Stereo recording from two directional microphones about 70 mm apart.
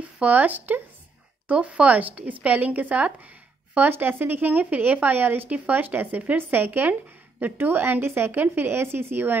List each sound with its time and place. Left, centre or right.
0.2 s speech: right